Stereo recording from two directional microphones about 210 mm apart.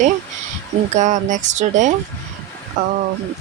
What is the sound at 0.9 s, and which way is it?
Speech, 35° right (ahead or behind).